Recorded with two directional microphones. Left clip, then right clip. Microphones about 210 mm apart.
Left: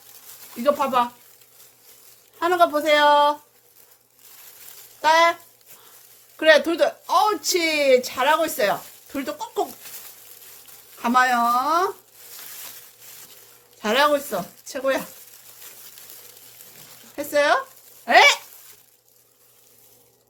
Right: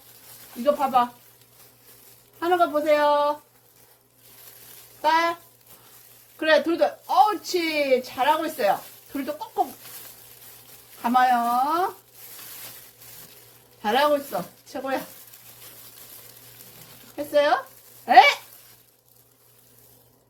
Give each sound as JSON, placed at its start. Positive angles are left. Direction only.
{"t": 0.6, "sound": "a woman's voice", "side_deg": 50}
{"t": 2.4, "sound": "a woman's voice", "side_deg": 50}
{"t": 5.0, "sound": "a woman's voice", "side_deg": 50}
{"t": 6.3, "sound": "a woman's voice", "side_deg": 50}
{"t": 11.0, "sound": "a woman's voice", "side_deg": 50}
{"t": 13.8, "sound": "a woman's voice", "side_deg": 50}
{"t": 17.2, "sound": "a woman's voice", "side_deg": 50}